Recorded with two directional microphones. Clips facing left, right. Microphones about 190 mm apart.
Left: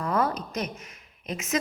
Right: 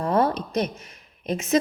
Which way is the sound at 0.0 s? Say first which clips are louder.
Right 5 dB; 30° right (ahead or behind).